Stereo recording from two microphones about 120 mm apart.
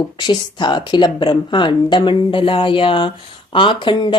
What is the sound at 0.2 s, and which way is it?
A woman's voice, 40° left (ahead or behind).